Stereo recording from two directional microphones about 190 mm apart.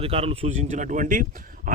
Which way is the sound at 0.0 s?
30° right (ahead or behind).